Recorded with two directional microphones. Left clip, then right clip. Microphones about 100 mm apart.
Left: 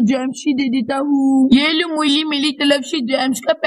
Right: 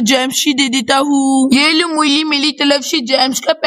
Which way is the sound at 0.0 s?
20° right (ahead or behind).